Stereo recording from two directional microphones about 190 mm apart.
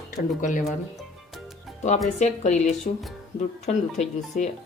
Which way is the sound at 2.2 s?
35° left (ahead or behind).